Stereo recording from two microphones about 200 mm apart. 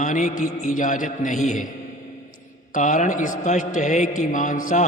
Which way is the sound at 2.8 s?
40° left (ahead or behind).